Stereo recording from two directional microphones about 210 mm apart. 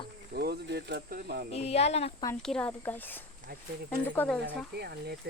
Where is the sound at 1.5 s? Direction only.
30° left (ahead or behind).